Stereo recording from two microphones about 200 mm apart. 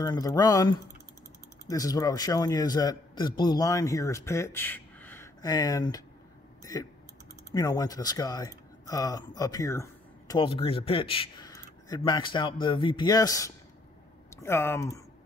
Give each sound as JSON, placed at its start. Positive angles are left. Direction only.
{"t": 0.0, "sound": "a man's voice", "side_deg": 20}